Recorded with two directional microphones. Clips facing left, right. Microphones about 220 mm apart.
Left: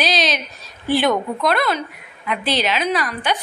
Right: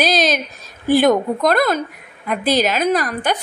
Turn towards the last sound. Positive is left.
turn(degrees=-45)  # may be behind; listen again after turning